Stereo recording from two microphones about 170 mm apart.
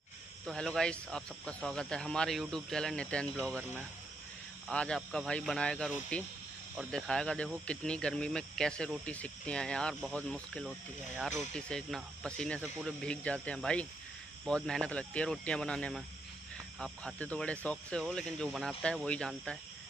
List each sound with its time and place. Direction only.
0.5 s speech: 5° left (ahead or behind)
4.6 s speech: 5° left (ahead or behind)